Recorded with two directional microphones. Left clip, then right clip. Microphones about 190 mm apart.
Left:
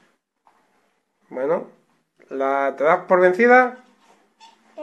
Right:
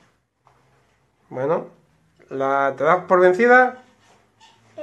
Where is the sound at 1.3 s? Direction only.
Centre (ahead or behind).